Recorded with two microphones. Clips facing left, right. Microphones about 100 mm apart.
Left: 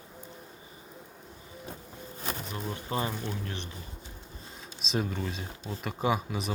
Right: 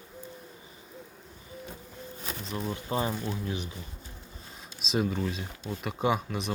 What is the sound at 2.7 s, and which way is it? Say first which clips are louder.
Speech: right 2 dB; 25° right (ahead or behind).